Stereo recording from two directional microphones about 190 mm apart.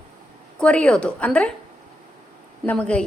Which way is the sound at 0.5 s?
5° left (ahead or behind).